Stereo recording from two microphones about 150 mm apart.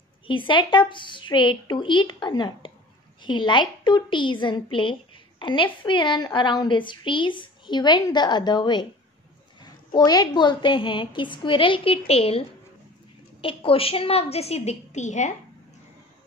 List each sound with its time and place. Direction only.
0.3 s a woman's voice: 35° left (ahead or behind); by 15.3 s 50° left (ahead or behind)